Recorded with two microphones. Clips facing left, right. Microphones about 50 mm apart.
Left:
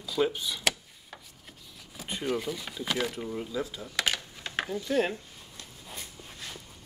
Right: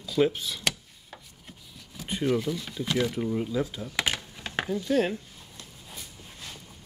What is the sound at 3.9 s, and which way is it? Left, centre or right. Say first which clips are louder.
Computer keyboard: even; right.